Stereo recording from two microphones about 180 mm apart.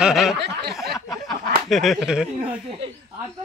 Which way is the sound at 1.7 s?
Centre (ahead or behind).